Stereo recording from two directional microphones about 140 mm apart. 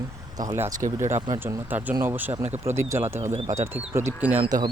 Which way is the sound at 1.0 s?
55° right (ahead or behind).